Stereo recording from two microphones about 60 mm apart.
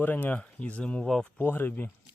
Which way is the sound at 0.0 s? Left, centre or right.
Left.